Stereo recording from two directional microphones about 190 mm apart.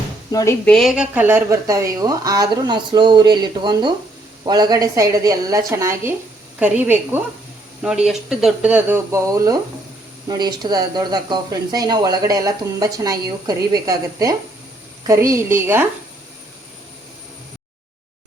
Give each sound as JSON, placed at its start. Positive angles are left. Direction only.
{"t": 0.3, "sound": "speech", "side_deg": 20}
{"t": 0.6, "sound": "a woman's voice", "side_deg": 5}